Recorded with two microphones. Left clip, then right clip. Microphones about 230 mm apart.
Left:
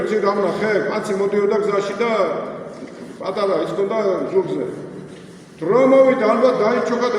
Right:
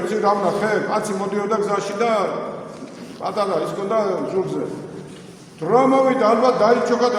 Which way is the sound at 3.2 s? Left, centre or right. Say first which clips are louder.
Even; right.